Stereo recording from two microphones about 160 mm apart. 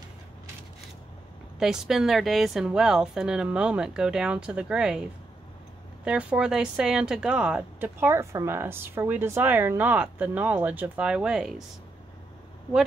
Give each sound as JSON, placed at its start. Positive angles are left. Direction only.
{"t": 1.6, "sound": "speech", "side_deg": 0}